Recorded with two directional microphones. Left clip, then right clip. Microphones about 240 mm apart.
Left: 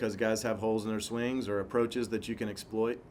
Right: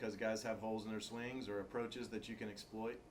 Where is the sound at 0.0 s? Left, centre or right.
Left.